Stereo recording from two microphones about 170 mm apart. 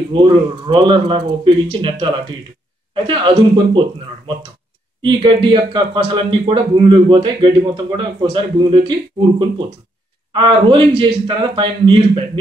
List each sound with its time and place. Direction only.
0.1 s speech: 30° right (ahead or behind)
5.0 s speech: 30° right (ahead or behind)
10.3 s speech: 30° right (ahead or behind)